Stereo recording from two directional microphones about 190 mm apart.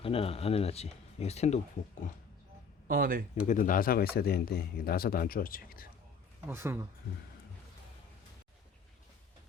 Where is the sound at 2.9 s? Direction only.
50° right (ahead or behind).